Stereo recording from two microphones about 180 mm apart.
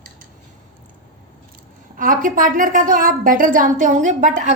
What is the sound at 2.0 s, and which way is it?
A woman's voice, 50° right (ahead or behind).